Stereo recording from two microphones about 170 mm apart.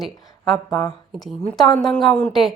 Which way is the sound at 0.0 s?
Centre (ahead or behind).